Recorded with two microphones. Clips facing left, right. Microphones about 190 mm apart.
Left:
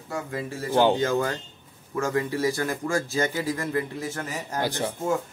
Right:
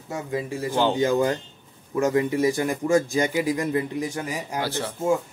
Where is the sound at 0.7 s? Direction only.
15° left (ahead or behind).